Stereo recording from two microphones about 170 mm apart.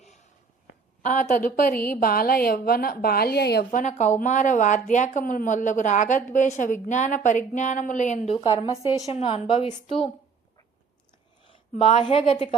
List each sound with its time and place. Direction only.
0.0 s a sound: 40° left (ahead or behind)
1.0 s a woman's voice: 45° left (ahead or behind)
8.4 s a woman's voice: 20° left (ahead or behind)
9.1 s a woman's voice: 30° left (ahead or behind)
11.8 s a woman's voice: 30° left (ahead or behind)